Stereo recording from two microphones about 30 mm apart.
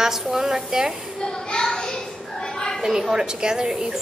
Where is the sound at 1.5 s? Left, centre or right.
Left.